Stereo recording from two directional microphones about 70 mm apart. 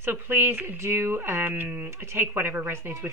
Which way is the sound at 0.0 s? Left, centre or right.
Right.